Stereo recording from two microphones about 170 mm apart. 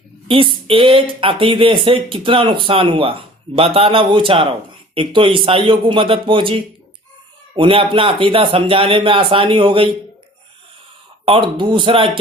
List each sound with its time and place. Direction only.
0.3 s speech: 30° right (ahead or behind)
11.3 s speech: 30° right (ahead or behind)